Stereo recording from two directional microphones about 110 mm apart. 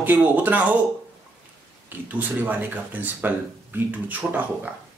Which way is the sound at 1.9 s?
15° right (ahead or behind).